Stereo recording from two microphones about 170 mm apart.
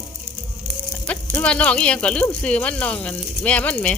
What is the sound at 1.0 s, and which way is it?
Speech, 10° left (ahead or behind).